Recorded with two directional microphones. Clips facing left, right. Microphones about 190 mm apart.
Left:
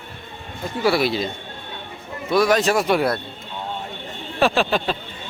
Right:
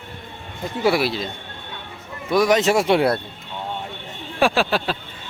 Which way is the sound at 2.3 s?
15° right (ahead or behind).